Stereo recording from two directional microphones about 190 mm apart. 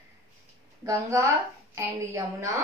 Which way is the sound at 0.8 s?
15° right (ahead or behind).